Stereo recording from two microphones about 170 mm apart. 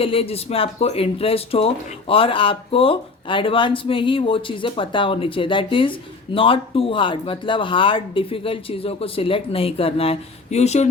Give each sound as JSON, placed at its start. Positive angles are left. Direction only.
{"t": 0.0, "sound": "speech", "side_deg": 35}